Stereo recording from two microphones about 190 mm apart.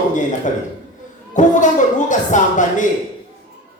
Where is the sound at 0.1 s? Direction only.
40° left (ahead or behind).